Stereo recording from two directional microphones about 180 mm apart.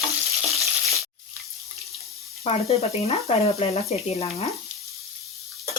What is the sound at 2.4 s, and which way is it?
Speech, 35° left (ahead or behind).